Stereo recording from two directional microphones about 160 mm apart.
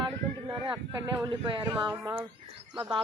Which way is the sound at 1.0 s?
20° right (ahead or behind).